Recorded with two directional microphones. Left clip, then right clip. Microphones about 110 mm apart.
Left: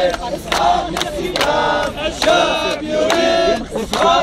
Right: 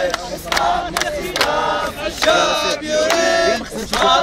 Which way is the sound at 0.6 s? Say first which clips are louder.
Left 4 dB; 20° left (ahead or behind).